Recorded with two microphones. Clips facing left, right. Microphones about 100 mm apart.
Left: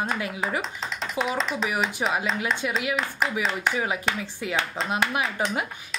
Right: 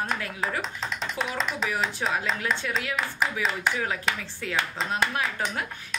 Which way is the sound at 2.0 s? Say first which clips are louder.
Left 2 dB; 20° left (ahead or behind).